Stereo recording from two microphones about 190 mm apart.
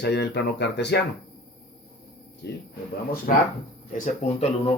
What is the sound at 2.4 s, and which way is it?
Speech, 60° left (ahead or behind).